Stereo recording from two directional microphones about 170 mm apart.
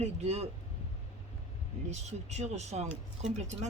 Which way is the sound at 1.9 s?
40° right (ahead or behind).